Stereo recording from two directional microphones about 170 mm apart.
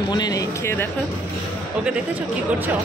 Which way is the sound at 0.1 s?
20° left (ahead or behind).